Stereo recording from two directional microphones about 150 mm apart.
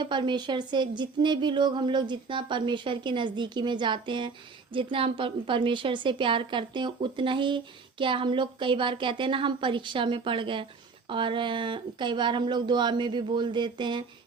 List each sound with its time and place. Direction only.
0.0 s a woman's voice: 30° right (ahead or behind)